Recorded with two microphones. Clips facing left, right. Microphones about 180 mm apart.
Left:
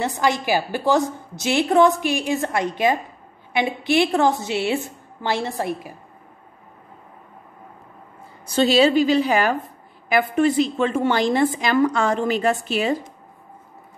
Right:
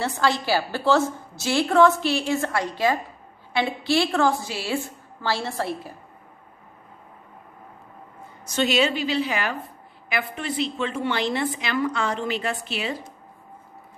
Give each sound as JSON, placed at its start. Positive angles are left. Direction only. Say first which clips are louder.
{"t": 0.0, "sound": "a woman's voice", "louder": "left 2 dB", "side_deg": 15}
{"t": 8.5, "sound": "a woman's voice", "louder": "left 6 dB", "side_deg": 35}